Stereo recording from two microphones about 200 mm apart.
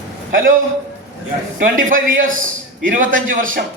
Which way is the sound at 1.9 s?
40° right (ahead or behind).